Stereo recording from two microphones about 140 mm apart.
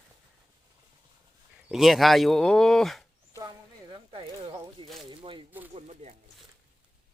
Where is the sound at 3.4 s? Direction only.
30° right (ahead or behind).